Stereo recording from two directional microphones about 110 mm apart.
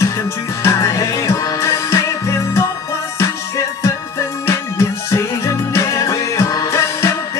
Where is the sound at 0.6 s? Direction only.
30° left (ahead or behind).